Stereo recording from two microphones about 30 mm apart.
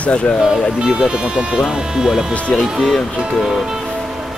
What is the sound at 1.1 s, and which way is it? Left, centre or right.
Speech, right.